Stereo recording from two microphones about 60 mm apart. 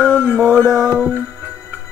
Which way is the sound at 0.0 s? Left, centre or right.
Left.